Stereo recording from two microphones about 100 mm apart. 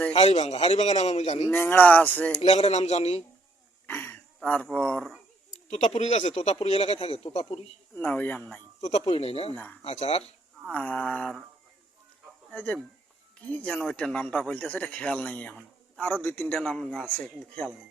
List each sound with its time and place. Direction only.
0.1 s speech: 90° left
1.5 s speech: 20° left (ahead or behind)
2.4 s speech: 90° left
3.8 s throat clearing: 20° left (ahead or behind)
4.4 s speech: 10° left (ahead or behind)
5.7 s speech: 90° left
7.9 s speech: 15° left (ahead or behind)
8.8 s speech: 75° left (ahead or behind)
9.8 s speech: 90° left
10.7 s speech: 10° left (ahead or behind)
12.5 s speech: 15° left (ahead or behind)